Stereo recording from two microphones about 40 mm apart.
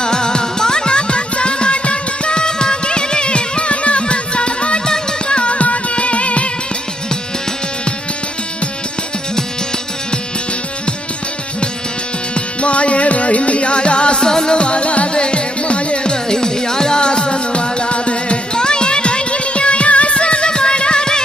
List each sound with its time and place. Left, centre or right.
0.0 s music: centre
12.6 s music: left
16.3 s music: centre